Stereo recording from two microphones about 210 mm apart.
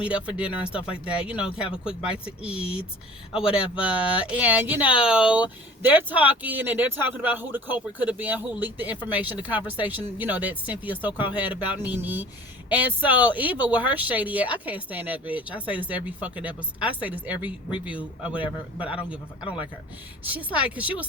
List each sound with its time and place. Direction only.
0.1 s speech: 5° right (ahead or behind)
19.4 s speech: 25° left (ahead or behind)
20.2 s speech: 5° right (ahead or behind)